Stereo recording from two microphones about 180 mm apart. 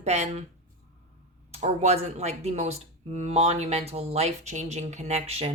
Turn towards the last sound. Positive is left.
turn(degrees=-35)  # may be behind; listen again after turning